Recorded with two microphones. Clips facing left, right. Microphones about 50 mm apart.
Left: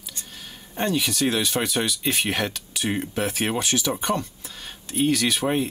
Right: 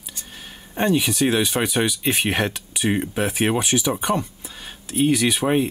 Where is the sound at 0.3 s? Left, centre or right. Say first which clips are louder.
Right 2 dB; centre.